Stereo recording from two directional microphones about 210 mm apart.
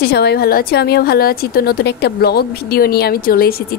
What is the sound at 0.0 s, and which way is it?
A woman's voice, 50° left (ahead or behind).